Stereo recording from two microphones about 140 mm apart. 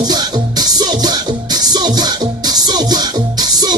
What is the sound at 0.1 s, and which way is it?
Music, 30° right (ahead or behind).